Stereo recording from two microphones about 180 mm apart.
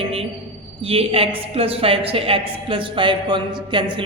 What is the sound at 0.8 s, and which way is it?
A woman's voice, 30° right (ahead or behind).